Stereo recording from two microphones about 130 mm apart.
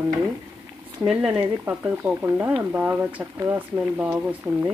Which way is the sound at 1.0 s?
5° right (ahead or behind).